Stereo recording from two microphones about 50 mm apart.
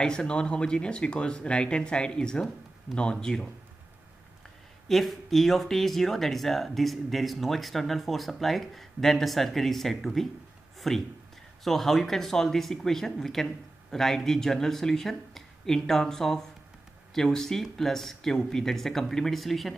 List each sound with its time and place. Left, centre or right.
0.0 s speech: centre
4.8 s speech: centre